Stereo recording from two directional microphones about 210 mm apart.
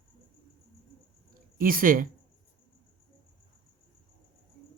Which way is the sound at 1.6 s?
45° right (ahead or behind).